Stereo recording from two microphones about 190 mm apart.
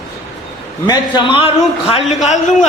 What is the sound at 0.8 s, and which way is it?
A man's voice, 25° left (ahead or behind).